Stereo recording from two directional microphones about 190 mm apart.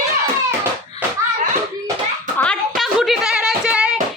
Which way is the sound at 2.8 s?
Centre (ahead or behind).